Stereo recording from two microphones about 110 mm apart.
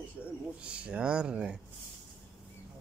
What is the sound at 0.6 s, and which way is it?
Speech, 10° right (ahead or behind).